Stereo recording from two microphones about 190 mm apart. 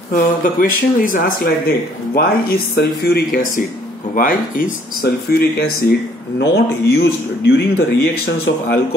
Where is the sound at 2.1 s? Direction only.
60° left (ahead or behind).